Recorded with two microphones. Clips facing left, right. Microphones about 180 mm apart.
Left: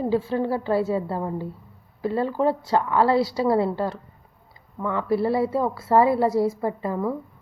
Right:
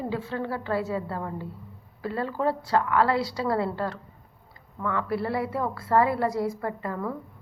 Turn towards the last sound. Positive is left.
turn(degrees=20)  # may be behind; listen again after turning